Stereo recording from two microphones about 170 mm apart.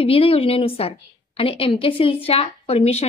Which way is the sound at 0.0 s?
35° left (ahead or behind).